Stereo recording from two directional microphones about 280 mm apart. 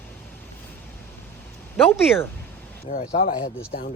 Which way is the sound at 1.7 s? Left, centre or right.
Centre.